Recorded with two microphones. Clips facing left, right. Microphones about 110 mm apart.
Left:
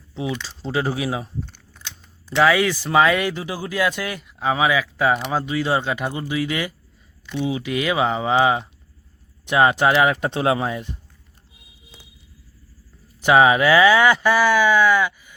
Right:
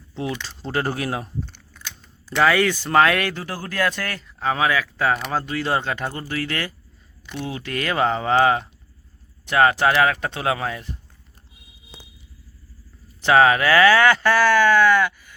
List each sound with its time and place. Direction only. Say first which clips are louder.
0.1 s speech: left 1 dB; centre (ahead or behind)
1.7 s camera: right 2 dB; 25° left (ahead or behind)
2.4 s speech: left 1 dB; 5° left (ahead or behind); by 10.8 s 20° left (ahead or behind)
13.2 s speech: left 1 dB; 15° left (ahead or behind)